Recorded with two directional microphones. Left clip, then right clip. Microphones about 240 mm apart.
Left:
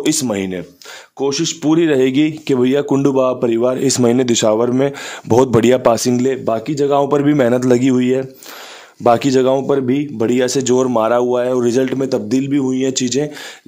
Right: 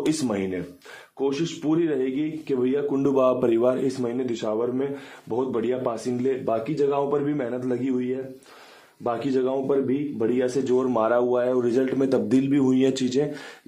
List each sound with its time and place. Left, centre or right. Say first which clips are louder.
0.0 s speech: left 7 dB; left
1.2 s speech: left 8 dB; left
3.0 s a man's voice: left 6 dB; left